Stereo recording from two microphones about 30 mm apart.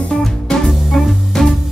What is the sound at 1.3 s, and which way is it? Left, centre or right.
Music, centre.